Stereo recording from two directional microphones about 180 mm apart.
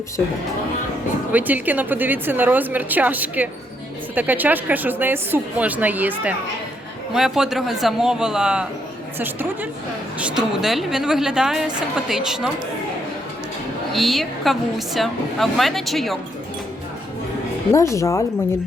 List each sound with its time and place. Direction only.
1.3 s a woman's voice: 10° right (ahead or behind)
13.9 s a woman's voice: centre (ahead or behind)
17.7 s speech: 15° left (ahead or behind)